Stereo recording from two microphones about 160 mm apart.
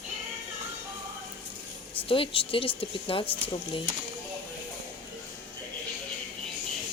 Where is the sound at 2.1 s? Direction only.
35° left (ahead or behind).